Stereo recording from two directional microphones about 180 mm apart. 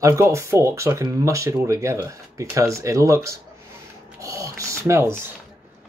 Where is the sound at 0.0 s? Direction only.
15° right (ahead or behind).